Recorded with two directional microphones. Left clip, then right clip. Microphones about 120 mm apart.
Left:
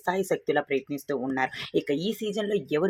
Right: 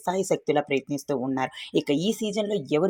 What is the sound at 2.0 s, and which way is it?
Speech, 30° right (ahead or behind).